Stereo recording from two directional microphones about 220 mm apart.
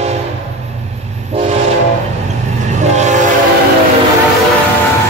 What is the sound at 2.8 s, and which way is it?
Train, 30° right (ahead or behind).